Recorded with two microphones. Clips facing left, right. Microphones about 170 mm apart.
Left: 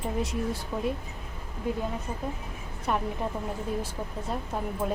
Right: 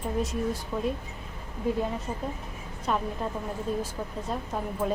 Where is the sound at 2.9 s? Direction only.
10° left (ahead or behind).